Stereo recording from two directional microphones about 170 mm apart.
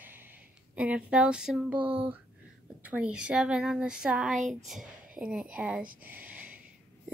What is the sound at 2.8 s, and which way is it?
Speech, 5° right (ahead or behind).